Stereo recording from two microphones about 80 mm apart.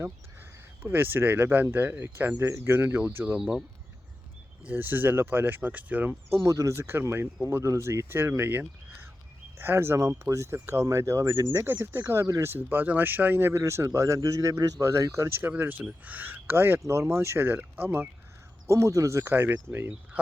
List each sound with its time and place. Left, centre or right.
0.8 s speech: right
3.3 s speech: centre
4.6 s speech: right
6.3 s speech: right
9.6 s speech: right
10.0 s a man's voice: right
11.6 s speech: right
13.9 s a man's voice: right
18.7 s speech: right
19.2 s speech: right